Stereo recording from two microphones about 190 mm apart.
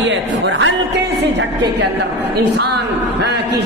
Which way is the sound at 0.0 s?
75° right (ahead or behind).